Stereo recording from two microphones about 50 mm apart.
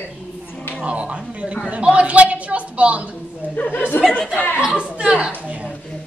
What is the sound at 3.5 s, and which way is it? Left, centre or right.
Speech, left.